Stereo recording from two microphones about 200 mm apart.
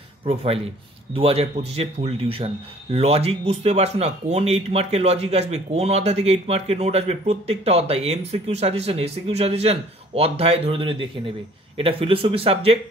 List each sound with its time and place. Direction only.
0.2 s speech: 30° right (ahead or behind)